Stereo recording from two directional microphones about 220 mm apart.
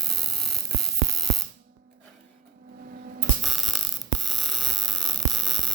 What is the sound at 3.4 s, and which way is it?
Hum, centre (ahead or behind).